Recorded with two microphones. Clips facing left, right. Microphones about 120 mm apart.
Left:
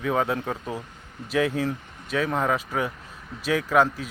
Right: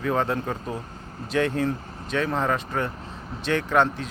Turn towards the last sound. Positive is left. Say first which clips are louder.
# left 1 dB
turn(degrees=5)  # may be behind; listen again after turning